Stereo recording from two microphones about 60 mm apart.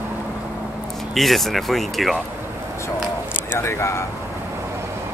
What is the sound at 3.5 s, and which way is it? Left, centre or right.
Speech, left.